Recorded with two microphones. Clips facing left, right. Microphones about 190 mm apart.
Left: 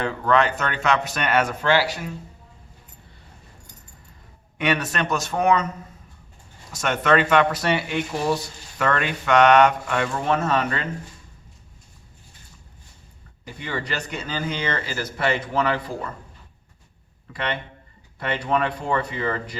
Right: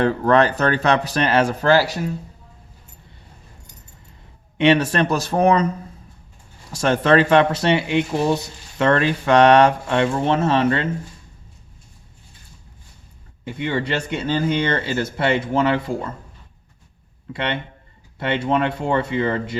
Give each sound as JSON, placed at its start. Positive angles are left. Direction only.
{"t": 0.0, "sound": "speech", "side_deg": -40}
{"t": 4.5, "sound": "speech", "side_deg": -30}
{"t": 13.4, "sound": "speech", "side_deg": -25}
{"t": 17.3, "sound": "speech", "side_deg": -25}